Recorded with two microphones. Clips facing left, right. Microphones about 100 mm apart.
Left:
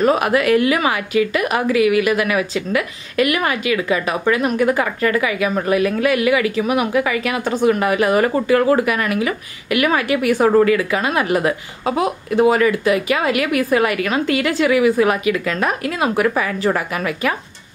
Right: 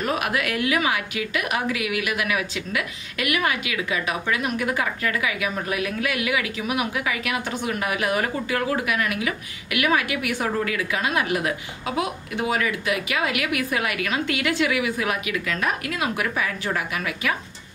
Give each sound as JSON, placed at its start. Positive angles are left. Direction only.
{"t": 0.0, "sound": "a woman's voice", "side_deg": 35}